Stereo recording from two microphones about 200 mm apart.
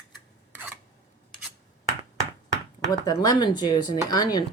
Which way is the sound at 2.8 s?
20° left (ahead or behind).